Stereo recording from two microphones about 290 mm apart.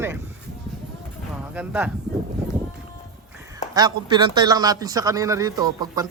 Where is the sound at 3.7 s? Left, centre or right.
Centre.